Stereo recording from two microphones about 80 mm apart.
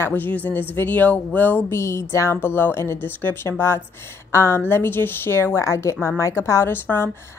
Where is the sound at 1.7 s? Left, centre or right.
Left.